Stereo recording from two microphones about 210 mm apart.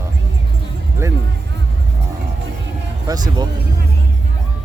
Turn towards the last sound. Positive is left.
turn(degrees=-20)  # may be behind; listen again after turning